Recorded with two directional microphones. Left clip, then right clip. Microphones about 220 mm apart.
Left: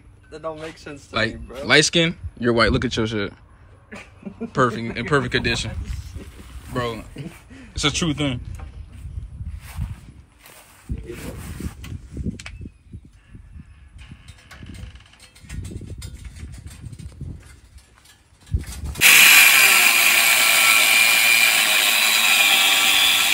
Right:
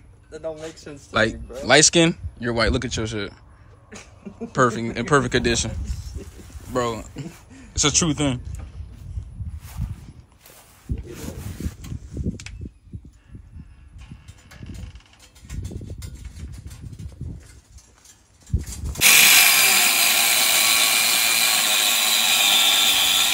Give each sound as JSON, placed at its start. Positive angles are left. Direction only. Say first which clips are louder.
{"t": 0.3, "sound": "speech", "louder": "left 1 dB", "side_deg": 25}
{"t": 0.9, "sound": "speech", "louder": "right 3 dB", "side_deg": -10}
{"t": 2.3, "sound": "speech", "louder": "left 4 dB", "side_deg": 10}
{"t": 4.5, "sound": "speech", "louder": "right 1 dB", "side_deg": 0}
{"t": 6.7, "sound": "speech", "louder": "right 2 dB", "side_deg": -10}
{"t": 15.6, "sound": "a sound", "louder": "right 1 dB", "side_deg": -15}
{"t": 18.6, "sound": "a sound", "louder": "left 2 dB", "side_deg": 15}
{"t": 18.9, "sound": "ratchet", "louder": "left 3 dB", "side_deg": -5}